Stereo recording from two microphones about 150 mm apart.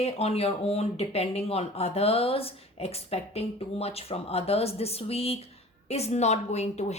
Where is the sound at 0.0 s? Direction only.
45° left (ahead or behind).